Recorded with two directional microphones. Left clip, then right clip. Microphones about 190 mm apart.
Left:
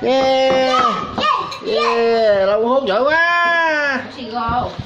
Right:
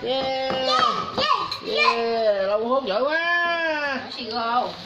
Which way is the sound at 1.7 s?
10° left (ahead or behind).